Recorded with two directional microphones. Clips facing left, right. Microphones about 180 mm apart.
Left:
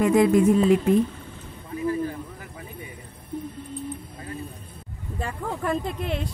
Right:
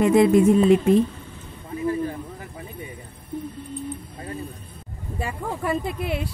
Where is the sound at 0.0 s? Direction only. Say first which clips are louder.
Right 2 dB; 25° right (ahead or behind).